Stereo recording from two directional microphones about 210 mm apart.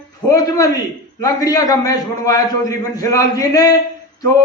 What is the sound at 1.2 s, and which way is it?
A man's voice, 15° left (ahead or behind).